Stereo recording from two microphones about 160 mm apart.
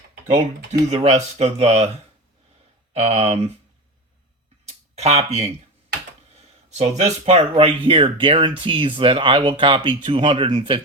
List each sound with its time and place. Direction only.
0.9 s speech: 40° right (ahead or behind)
2.9 s speech: 40° right (ahead or behind)
4.6 s a sound: 40° right (ahead or behind)
6.3 s speech: 45° right (ahead or behind)